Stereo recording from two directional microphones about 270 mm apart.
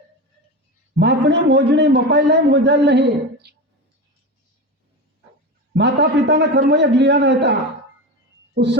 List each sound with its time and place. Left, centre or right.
0.9 s a man's voice: right
3.4 s clicking: right
5.7 s a man's voice: right
8.5 s speech: right